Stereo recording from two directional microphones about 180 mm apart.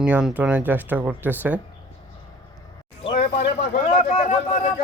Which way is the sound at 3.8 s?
35° left (ahead or behind).